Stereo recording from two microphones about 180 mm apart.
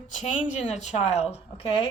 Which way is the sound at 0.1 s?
40° left (ahead or behind).